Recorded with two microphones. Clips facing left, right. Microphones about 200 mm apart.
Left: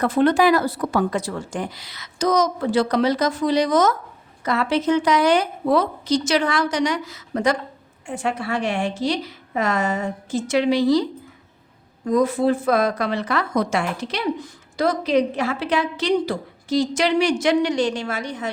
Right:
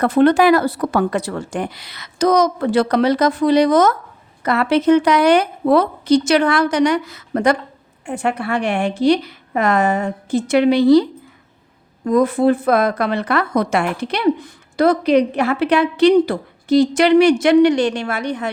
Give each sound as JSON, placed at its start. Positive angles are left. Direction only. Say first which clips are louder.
{"t": 0.0, "sound": "a woman's voice", "louder": "right 4 dB", "side_deg": -65}
{"t": 12.0, "sound": "a woman's voice", "louder": "right 4 dB", "side_deg": -55}